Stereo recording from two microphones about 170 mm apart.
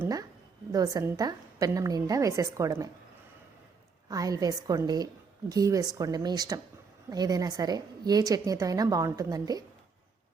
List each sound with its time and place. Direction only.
0.0 s a sound: 20° right (ahead or behind)
0.7 s a woman's voice: 20° right (ahead or behind)
4.1 s a woman's voice: 20° right (ahead or behind)